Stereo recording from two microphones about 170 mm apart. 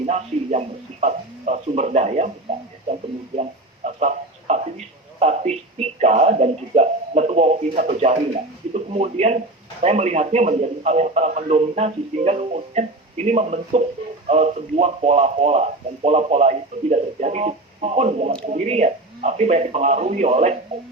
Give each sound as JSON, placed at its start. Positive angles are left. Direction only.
{"t": 0.0, "sound": "speech", "side_deg": -40}
{"t": 3.8, "sound": "a sound", "side_deg": -40}
{"t": 7.8, "sound": "speech", "side_deg": -45}